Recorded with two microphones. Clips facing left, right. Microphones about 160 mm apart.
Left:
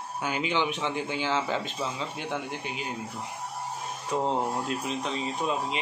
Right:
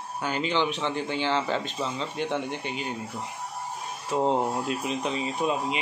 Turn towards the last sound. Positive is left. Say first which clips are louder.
# right 2 dB
turn(degrees=-5)  # may be behind; listen again after turning